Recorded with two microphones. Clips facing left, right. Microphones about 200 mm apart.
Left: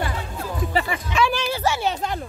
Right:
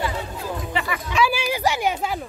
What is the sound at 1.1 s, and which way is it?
Speech, 5° right (ahead or behind).